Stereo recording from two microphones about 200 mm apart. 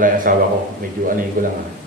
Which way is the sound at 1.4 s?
40° right (ahead or behind).